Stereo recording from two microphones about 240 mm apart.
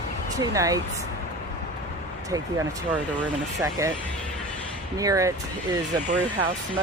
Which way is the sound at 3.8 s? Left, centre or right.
Centre.